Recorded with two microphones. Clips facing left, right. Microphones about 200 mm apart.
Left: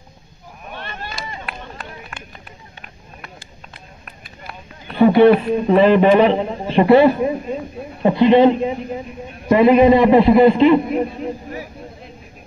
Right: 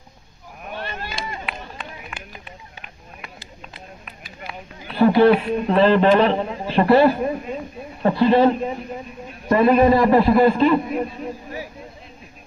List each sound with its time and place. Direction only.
4.9 s a man's voice: 20° left (ahead or behind)